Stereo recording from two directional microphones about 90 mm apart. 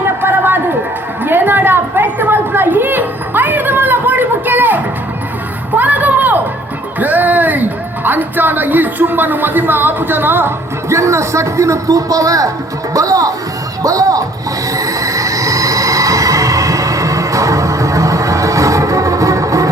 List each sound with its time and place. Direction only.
0.2 s a sound: 25° right (ahead or behind)
7.0 s a woman's voice: 20° right (ahead or behind); by 14.3 s 40° right (ahead or behind)
14.7 s music: 40° right (ahead or behind)